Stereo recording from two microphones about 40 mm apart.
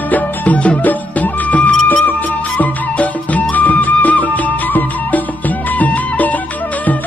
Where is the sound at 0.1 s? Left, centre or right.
Left.